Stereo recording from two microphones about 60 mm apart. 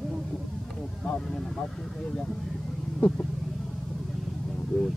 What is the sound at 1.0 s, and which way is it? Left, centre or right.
Speech, centre.